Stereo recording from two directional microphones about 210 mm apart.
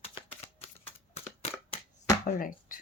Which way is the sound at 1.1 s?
30° left (ahead or behind).